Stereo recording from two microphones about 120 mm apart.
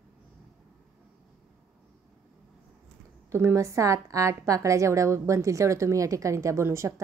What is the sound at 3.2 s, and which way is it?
A woman's voice, 25° right (ahead or behind).